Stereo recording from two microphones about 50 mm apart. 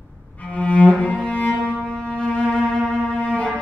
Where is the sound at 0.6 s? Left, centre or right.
Left.